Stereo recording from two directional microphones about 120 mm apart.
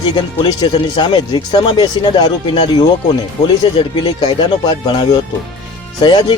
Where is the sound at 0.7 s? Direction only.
45° left (ahead or behind).